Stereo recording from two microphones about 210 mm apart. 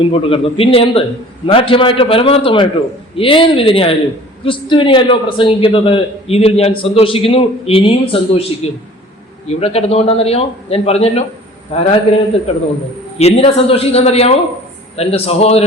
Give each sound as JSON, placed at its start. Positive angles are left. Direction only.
{"t": 0.0, "sound": "a man's voice", "side_deg": 25}
{"t": 9.5, "sound": "a man's voice", "side_deg": 30}
{"t": 13.1, "sound": "a man's voice", "side_deg": 30}